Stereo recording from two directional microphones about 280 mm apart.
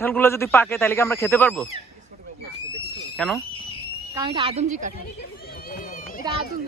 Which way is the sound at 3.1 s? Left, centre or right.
Centre.